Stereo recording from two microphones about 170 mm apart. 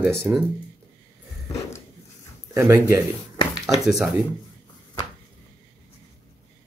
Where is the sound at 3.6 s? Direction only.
Centre (ahead or behind).